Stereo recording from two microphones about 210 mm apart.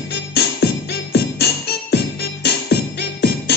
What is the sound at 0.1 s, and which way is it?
Music, 50° left (ahead or behind).